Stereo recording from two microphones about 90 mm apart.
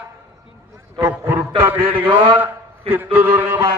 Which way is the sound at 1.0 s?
25° right (ahead or behind).